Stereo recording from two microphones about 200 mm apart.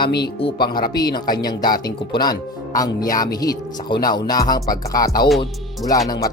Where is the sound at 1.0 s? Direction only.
20° left (ahead or behind).